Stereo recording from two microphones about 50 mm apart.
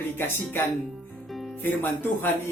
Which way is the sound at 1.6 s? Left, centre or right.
Left.